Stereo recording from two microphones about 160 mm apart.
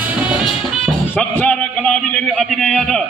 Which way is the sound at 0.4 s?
5° left (ahead or behind).